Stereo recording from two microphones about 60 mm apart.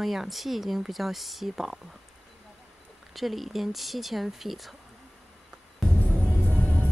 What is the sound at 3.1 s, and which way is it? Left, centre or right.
Speech, centre.